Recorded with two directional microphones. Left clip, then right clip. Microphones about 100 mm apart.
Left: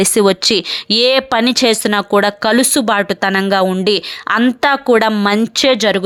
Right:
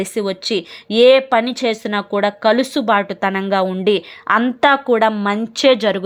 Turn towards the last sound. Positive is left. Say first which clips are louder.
# left 3 dB
turn(degrees=20)  # may be behind; listen again after turning